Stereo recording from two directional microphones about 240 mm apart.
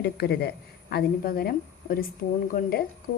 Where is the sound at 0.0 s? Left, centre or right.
Left.